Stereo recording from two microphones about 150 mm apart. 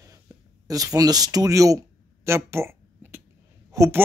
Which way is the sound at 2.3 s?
20° right (ahead or behind).